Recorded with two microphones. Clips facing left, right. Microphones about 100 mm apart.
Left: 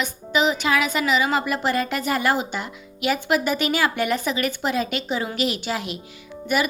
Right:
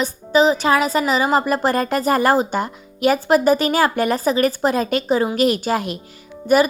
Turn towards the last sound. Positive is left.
turn(degrees=-40)  # may be behind; listen again after turning